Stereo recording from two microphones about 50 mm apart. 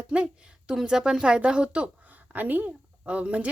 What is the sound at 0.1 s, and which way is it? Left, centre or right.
A woman's voice, right.